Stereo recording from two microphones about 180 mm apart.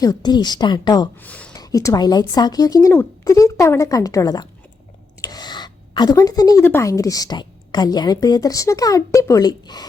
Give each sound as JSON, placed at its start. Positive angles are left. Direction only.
{"t": 0.0, "sound": "speech", "side_deg": 20}
{"t": 1.2, "sound": "speech", "side_deg": 5}
{"t": 1.5, "sound": "a woman's voice", "side_deg": 20}